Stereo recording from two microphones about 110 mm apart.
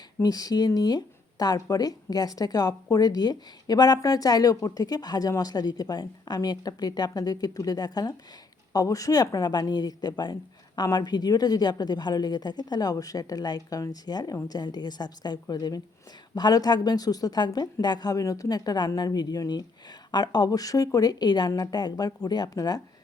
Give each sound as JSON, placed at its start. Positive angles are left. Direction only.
{"t": 0.2, "sound": "speech", "side_deg": 35}